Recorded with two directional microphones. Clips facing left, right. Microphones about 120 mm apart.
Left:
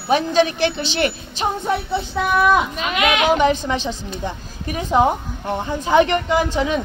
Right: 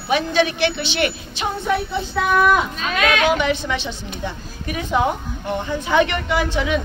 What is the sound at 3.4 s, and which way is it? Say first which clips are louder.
Speech: left 4 dB; 40° left (ahead or behind).